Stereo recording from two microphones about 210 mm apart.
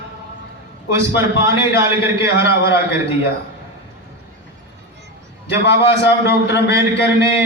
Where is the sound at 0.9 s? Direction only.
15° right (ahead or behind).